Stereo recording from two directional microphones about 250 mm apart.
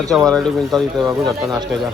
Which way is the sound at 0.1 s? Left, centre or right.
Centre.